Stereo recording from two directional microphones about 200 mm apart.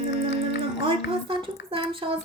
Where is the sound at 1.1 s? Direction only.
25° right (ahead or behind).